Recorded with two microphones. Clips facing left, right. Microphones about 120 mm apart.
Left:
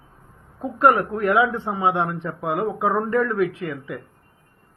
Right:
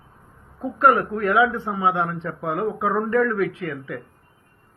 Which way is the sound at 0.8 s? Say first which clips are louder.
Left 1 dB; 25° left (ahead or behind).